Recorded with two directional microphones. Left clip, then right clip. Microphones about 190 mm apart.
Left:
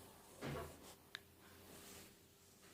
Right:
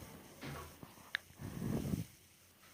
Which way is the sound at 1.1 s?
30° right (ahead or behind).